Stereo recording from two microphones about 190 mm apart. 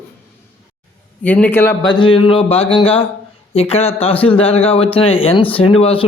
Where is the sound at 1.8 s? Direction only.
25° left (ahead or behind).